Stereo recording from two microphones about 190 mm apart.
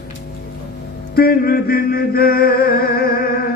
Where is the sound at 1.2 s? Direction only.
50° left (ahead or behind).